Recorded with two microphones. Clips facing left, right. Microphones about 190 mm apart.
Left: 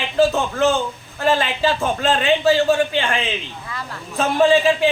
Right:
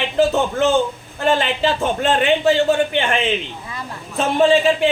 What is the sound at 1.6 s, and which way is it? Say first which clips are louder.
Speech: right 1 dB; 20° right (ahead or behind).